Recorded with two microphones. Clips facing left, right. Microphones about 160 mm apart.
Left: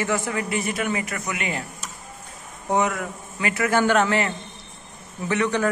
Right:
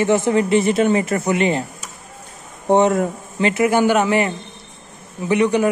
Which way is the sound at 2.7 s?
30° right (ahead or behind).